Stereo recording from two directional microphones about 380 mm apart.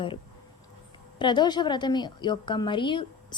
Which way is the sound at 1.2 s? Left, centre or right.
Centre.